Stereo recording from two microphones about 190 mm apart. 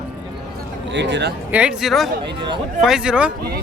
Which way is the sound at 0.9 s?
65° right (ahead or behind).